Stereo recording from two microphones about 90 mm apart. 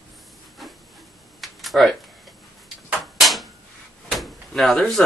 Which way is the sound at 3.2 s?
Centre (ahead or behind).